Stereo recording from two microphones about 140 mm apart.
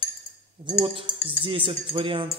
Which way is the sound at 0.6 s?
40° right (ahead or behind).